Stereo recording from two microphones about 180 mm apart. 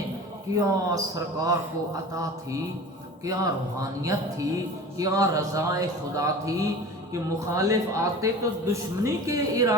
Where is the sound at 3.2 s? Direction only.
20° right (ahead or behind).